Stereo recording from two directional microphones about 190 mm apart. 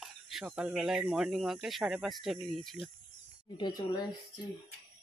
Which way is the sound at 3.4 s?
25° left (ahead or behind).